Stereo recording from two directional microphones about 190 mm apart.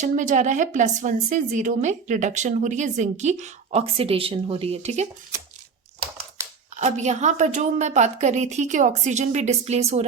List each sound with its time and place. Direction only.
0.0 s a woman's voice: 40° right (ahead or behind)
6.7 s a woman's voice: 40° right (ahead or behind)